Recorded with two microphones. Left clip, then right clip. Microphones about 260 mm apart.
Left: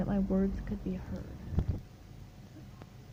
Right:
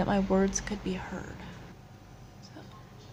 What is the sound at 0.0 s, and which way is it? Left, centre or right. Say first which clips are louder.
Speech: right 7 dB; centre.